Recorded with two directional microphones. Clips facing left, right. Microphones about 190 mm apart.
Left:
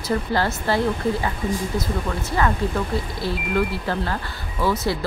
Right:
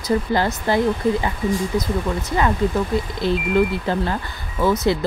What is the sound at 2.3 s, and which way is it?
Speech, 20° right (ahead or behind).